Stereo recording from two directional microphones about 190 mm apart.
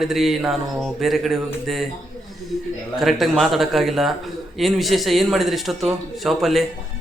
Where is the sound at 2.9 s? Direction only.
Centre (ahead or behind).